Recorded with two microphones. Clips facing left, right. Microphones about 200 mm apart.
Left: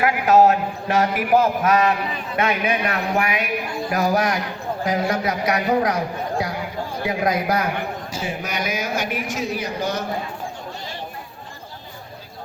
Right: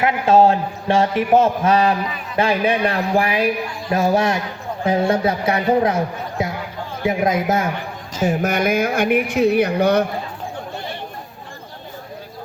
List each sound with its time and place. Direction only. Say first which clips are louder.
0.0 s a man's voice: right 1 dB; 25° right (ahead or behind)
6.4 s a sound: right 8 dB; 25° right (ahead or behind)
7.0 s a man's voice: right 4 dB; 25° right (ahead or behind)
8.2 s speech: right 10 dB; 50° right (ahead or behind)